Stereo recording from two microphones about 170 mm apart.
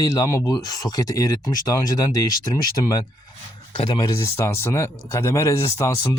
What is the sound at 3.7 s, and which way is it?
Speech, 25° left (ahead or behind).